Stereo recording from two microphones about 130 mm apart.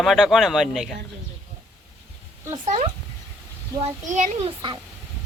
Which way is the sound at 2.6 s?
60° right (ahead or behind).